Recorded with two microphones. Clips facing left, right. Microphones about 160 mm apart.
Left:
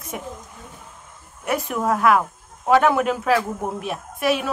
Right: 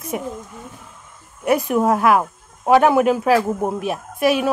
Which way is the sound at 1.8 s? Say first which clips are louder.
Right 2 dB; 15° right (ahead or behind).